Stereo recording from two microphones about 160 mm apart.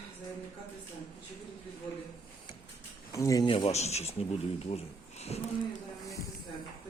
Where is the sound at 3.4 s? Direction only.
35° left (ahead or behind).